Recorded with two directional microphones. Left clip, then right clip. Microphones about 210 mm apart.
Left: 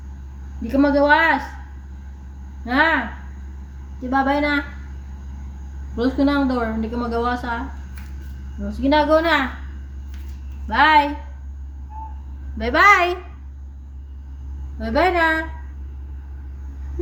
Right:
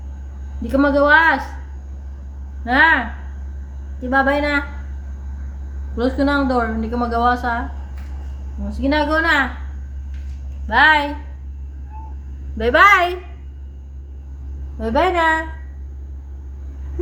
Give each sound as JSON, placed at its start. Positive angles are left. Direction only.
{"t": 0.7, "sound": "a woman's voice", "side_deg": -15}
{"t": 2.6, "sound": "a woman's voice", "side_deg": -15}
{"t": 4.1, "sound": "a woman's voice", "side_deg": -15}
{"t": 6.0, "sound": "a woman's voice", "side_deg": -15}
{"t": 8.8, "sound": "a woman's voice", "side_deg": -15}
{"t": 10.7, "sound": "a woman's voice", "side_deg": -20}
{"t": 12.5, "sound": "a woman's voice", "side_deg": -20}
{"t": 14.8, "sound": "a woman's voice", "side_deg": -15}